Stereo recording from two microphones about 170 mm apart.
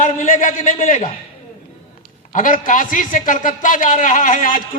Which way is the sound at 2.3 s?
55° left (ahead or behind).